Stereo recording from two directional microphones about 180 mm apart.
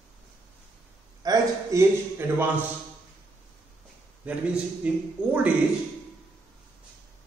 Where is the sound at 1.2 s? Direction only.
20° right (ahead or behind).